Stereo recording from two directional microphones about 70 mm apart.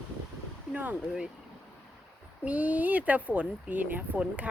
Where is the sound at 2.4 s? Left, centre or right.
Right.